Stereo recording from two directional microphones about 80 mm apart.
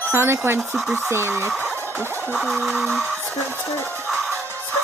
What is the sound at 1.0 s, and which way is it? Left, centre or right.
Speech, right.